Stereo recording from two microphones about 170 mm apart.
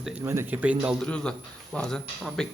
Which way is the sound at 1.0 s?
5° left (ahead or behind).